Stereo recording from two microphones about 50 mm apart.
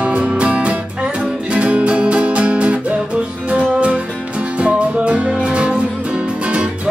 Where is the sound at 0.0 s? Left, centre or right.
Right.